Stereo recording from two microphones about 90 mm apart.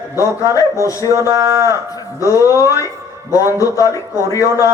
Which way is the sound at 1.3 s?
35° right (ahead or behind).